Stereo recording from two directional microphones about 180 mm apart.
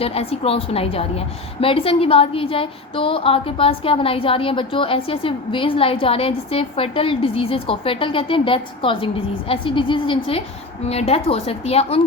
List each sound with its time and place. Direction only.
0.0 s a woman's voice: 35° left (ahead or behind)